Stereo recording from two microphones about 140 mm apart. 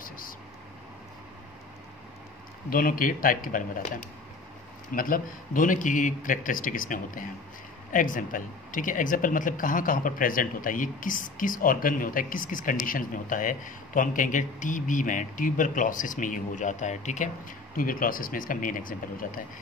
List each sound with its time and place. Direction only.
2.7 s speech: 85° left
4.9 s speech: 85° left; by 17.3 s 55° left (ahead or behind)
17.7 s speech: 85° left